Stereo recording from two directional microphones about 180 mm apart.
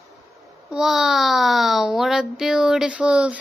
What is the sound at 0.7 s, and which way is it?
A child's voice, centre (ahead or behind).